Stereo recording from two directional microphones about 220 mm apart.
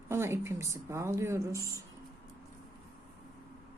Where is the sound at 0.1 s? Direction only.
10° right (ahead or behind).